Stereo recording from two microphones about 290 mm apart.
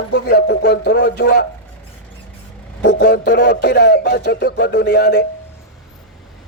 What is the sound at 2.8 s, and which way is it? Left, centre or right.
A man's voice, left.